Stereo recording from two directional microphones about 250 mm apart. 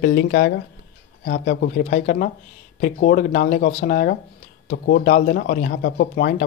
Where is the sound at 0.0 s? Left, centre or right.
Left.